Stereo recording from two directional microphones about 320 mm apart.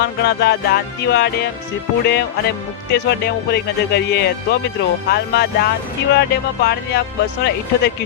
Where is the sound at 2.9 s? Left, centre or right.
Left.